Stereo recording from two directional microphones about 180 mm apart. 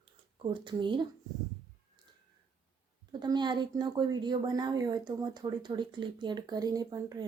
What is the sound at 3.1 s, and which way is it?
A woman's voice, 25° right (ahead or behind).